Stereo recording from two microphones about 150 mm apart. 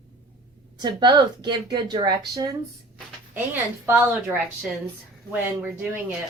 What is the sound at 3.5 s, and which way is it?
Speech, 15° right (ahead or behind).